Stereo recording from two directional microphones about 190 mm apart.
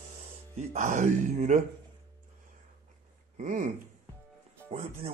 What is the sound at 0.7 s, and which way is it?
Speech, 40° right (ahead or behind).